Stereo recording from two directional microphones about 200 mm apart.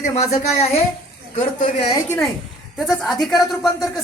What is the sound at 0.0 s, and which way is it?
Speech, 35° left (ahead or behind).